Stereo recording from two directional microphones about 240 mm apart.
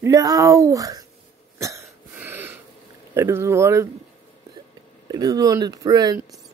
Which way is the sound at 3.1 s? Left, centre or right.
Centre.